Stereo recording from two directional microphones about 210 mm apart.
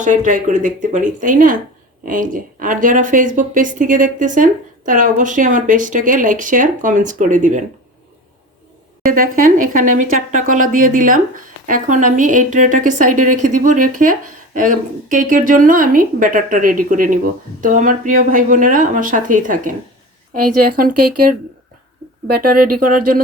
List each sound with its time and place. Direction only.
0.0 s speech: 40° right (ahead or behind)
9.0 s a woman's voice: 40° right (ahead or behind)